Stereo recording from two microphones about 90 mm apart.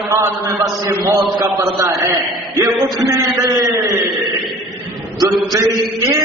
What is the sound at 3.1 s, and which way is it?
Speech, 40° right (ahead or behind).